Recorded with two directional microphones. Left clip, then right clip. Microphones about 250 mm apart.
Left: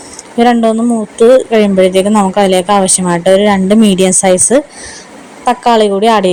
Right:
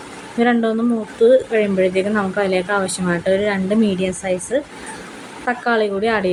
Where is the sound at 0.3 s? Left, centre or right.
Left.